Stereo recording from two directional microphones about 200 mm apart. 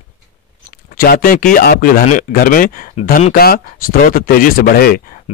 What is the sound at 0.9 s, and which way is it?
Speech, 45° left (ahead or behind).